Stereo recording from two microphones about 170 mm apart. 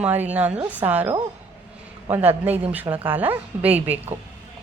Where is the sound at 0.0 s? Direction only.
10° right (ahead or behind).